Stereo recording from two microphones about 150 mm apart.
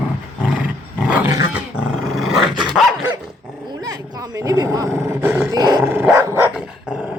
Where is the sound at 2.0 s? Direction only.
Centre (ahead or behind).